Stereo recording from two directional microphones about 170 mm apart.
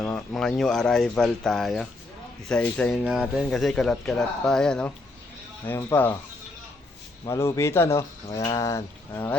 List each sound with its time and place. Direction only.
0.0 s speech: 5° left (ahead or behind)
7.3 s speech: 15° left (ahead or behind)